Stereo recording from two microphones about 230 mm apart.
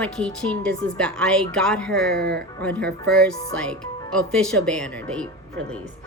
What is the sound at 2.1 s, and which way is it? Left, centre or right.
Speech, right.